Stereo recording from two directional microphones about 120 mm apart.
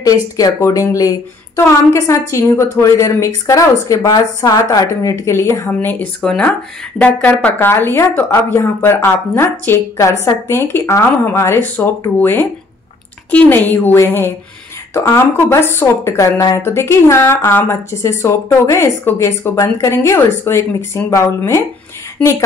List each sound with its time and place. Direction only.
0.0 s a woman's voice: 25° left (ahead or behind)